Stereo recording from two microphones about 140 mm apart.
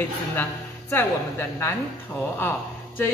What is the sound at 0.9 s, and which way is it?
Speech, 20° left (ahead or behind).